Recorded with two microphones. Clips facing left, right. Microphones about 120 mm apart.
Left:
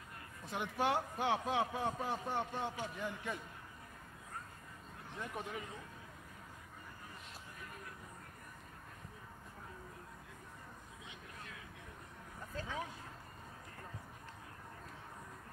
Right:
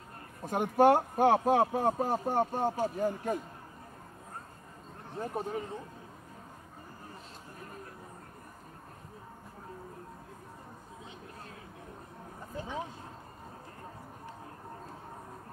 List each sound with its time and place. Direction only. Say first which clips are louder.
0.4 s a man's voice: right 13 dB; 45° right (ahead or behind)
5.1 s speech: right 9 dB; 35° right (ahead or behind)
12.5 s speech: right 5 dB; 20° right (ahead or behind)